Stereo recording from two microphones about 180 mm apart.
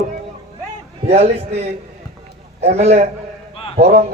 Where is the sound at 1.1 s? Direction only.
35° right (ahead or behind).